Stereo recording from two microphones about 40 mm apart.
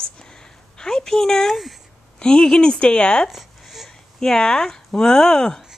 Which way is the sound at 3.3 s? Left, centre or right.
Centre.